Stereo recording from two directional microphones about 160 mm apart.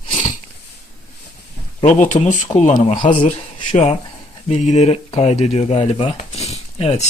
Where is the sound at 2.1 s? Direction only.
50° left (ahead or behind).